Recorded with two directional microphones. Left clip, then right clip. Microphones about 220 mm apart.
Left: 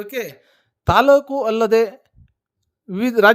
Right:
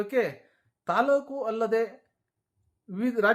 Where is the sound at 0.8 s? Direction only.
45° left (ahead or behind).